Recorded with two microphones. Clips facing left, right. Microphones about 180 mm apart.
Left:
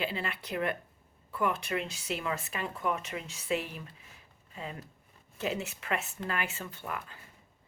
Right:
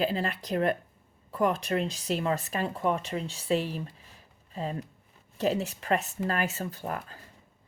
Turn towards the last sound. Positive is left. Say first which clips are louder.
# right 5 dB
turn(degrees=-40)  # may be behind; listen again after turning